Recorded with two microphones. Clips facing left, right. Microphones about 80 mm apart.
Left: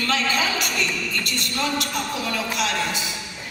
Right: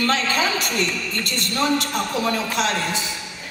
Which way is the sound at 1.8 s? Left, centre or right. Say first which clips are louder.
Right 4 dB; right.